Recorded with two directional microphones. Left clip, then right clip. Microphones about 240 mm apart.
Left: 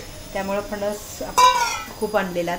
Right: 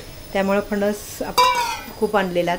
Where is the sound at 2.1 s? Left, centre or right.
Right.